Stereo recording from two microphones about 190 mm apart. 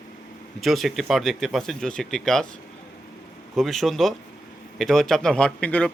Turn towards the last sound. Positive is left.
turn(degrees=5)  # may be behind; listen again after turning